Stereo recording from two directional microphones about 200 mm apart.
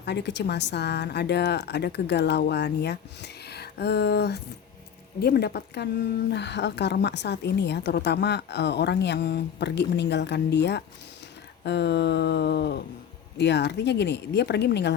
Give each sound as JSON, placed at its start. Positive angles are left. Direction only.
{"t": 0.0, "sound": "a woman's voice", "side_deg": 60}